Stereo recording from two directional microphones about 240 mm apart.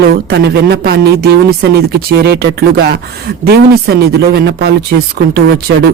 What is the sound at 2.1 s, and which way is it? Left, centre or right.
Speech, right.